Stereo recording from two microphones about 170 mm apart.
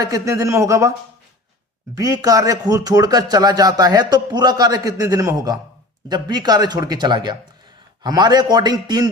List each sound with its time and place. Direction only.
0.0 s speech: 20° right (ahead or behind)
2.0 s speech: 20° right (ahead or behind)